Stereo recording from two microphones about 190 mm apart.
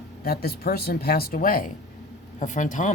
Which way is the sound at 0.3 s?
55° left (ahead or behind).